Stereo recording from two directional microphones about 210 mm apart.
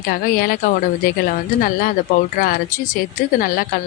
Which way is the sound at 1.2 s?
40° left (ahead or behind).